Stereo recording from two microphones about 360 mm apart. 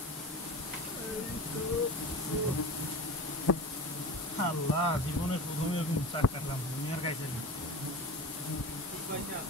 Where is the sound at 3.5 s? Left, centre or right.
Left.